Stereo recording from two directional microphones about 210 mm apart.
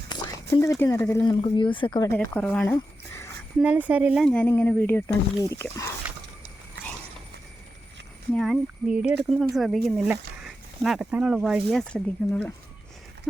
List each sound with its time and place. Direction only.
0.5 s speech: 15° left (ahead or behind)
2.1 s speech: 5° left (ahead or behind)
3.6 s speech: 5° right (ahead or behind); by 5.9 s 15° left (ahead or behind)
8.3 s speech: centre (ahead or behind)